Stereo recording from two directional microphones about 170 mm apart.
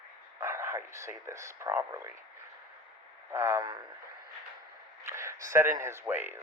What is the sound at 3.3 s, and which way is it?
Speech, 15° right (ahead or behind).